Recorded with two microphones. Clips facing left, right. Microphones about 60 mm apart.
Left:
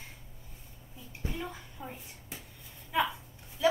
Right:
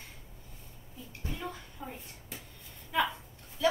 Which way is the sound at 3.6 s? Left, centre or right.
Centre.